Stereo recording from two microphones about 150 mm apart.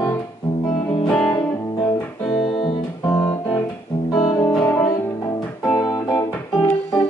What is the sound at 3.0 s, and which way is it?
Music, 20° left (ahead or behind).